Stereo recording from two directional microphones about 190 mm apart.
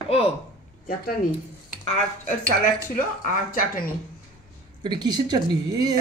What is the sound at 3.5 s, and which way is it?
Speech, 50° left (ahead or behind).